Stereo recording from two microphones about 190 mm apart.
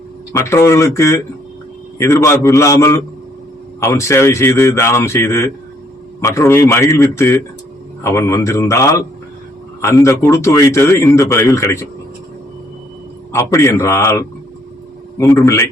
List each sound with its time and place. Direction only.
0.3 s a man's voice: 15° left (ahead or behind)
13.3 s a man's voice: 15° left (ahead or behind)